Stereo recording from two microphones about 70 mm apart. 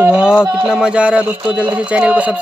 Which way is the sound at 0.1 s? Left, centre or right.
Centre.